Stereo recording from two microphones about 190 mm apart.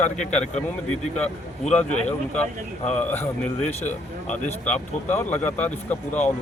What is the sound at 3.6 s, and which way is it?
Speech, 40° left (ahead or behind).